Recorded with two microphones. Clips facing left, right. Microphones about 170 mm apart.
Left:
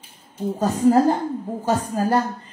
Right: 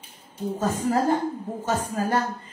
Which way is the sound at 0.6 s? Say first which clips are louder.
Left 7 dB; 35° left (ahead or behind).